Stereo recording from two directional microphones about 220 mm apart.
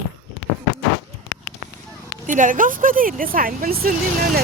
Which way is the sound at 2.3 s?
35° right (ahead or behind).